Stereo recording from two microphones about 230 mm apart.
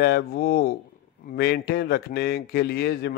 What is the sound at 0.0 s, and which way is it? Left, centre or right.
A man's voice, left.